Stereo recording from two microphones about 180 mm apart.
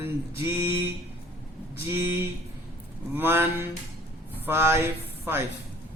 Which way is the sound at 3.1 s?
10° right (ahead or behind).